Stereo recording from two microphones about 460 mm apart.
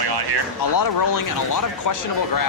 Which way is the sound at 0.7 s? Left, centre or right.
Left.